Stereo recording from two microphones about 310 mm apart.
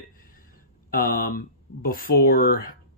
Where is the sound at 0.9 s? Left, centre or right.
Left.